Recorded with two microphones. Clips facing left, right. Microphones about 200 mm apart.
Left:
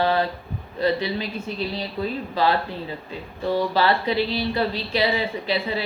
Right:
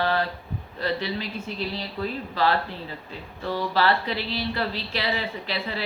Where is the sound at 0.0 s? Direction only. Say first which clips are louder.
Left 4 dB; 15° left (ahead or behind).